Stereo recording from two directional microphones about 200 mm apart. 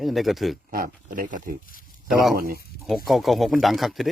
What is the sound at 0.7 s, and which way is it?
Speech, 45° right (ahead or behind).